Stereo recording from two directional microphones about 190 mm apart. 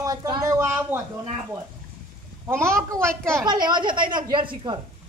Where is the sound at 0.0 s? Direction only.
20° right (ahead or behind).